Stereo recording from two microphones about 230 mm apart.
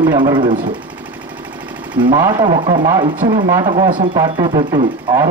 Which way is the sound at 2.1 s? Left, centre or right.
Centre.